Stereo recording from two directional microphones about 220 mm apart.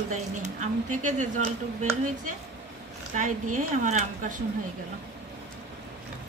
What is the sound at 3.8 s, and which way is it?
Speech, 35° right (ahead or behind).